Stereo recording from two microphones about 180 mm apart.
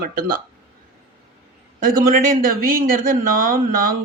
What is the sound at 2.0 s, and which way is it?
Speech, 50° right (ahead or behind).